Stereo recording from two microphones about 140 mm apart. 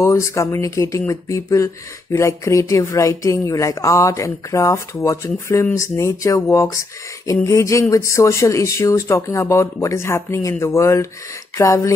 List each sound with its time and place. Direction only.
0.0 s speech: 20° left (ahead or behind)